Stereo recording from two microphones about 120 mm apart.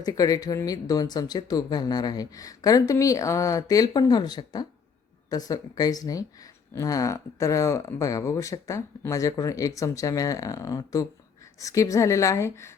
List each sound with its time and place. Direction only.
0.0 s speech: 30° left (ahead or behind)